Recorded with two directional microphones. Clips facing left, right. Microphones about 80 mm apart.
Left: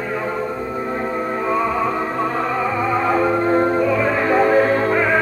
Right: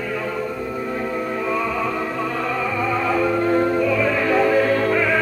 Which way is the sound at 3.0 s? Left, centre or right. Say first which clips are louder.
Left 2 dB; left.